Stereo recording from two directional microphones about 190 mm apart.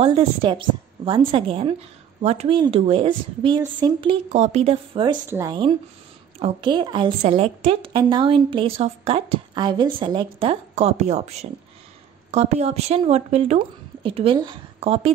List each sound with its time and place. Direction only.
0.0 s speech: 25° right (ahead or behind)
5.3 s a woman's voice: 15° right (ahead or behind)